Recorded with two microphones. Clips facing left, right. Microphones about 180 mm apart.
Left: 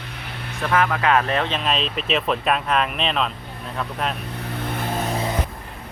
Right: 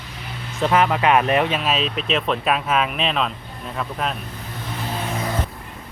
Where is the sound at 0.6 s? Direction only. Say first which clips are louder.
Right 3 dB; 20° right (ahead or behind); by 4.2 s centre (ahead or behind).